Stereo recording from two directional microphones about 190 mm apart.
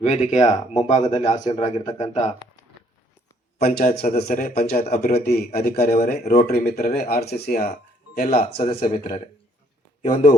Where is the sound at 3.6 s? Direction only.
55° left (ahead or behind).